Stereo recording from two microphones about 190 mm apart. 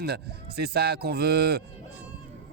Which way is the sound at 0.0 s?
55° right (ahead or behind).